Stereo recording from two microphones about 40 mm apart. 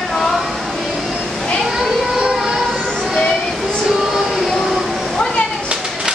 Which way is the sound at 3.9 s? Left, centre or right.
Centre.